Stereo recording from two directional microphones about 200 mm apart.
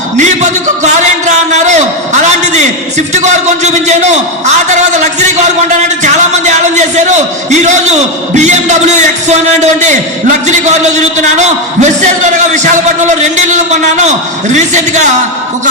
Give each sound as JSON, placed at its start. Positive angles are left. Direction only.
{"t": 0.9, "sound": "a sound", "side_deg": -35}
{"t": 3.1, "sound": "a man's voice", "side_deg": -35}
{"t": 6.0, "sound": "a sound", "side_deg": -35}
{"t": 8.4, "sound": "a man's voice", "side_deg": -35}
{"t": 10.4, "sound": "a man's voice", "side_deg": -35}
{"t": 14.5, "sound": "a man's voice", "side_deg": -35}